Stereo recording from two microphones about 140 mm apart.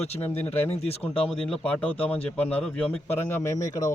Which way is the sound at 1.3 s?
5° left (ahead or behind).